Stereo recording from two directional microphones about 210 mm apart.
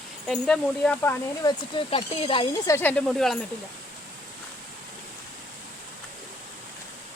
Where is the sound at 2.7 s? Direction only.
5° left (ahead or behind).